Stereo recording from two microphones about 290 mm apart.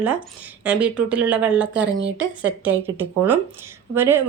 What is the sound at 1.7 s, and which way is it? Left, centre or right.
Speech, right.